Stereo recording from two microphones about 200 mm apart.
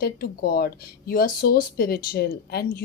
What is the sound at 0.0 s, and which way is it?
Speech, 45° left (ahead or behind).